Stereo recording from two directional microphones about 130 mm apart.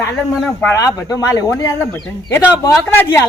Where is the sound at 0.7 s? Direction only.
25° left (ahead or behind).